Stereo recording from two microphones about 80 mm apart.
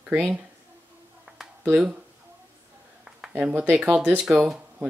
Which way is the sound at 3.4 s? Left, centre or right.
Centre.